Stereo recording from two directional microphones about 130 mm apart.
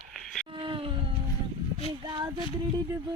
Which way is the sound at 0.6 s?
40° right (ahead or behind).